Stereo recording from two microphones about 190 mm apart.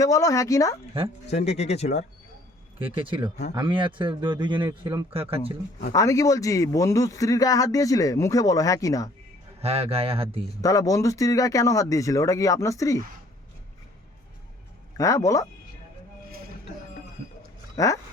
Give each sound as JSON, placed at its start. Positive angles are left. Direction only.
{"t": 0.0, "sound": "speech", "side_deg": 15}
{"t": 1.5, "sound": "speech", "side_deg": 35}
{"t": 2.7, "sound": "speech", "side_deg": -30}
{"t": 5.9, "sound": "speech", "side_deg": 15}
{"t": 9.6, "sound": "speech", "side_deg": -30}
{"t": 10.6, "sound": "speech", "side_deg": 15}
{"t": 14.9, "sound": "speech", "side_deg": 15}
{"t": 17.7, "sound": "speech", "side_deg": 15}